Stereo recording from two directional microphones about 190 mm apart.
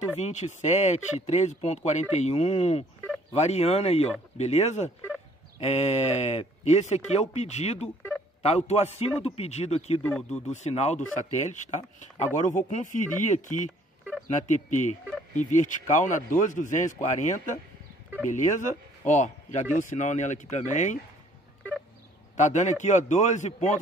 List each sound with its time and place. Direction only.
0.2 s speech: 40° left (ahead or behind)
10.0 s speech: 5° left (ahead or behind)
10.5 s a man's voice: 35° left (ahead or behind)
22.4 s speech: 40° left (ahead or behind)